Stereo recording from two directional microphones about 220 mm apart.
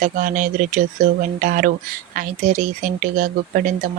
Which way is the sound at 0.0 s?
35° right (ahead or behind).